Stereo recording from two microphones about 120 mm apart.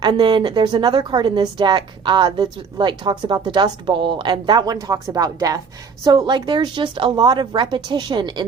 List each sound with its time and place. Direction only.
0.0 s a woman's voice: 40° right (ahead or behind)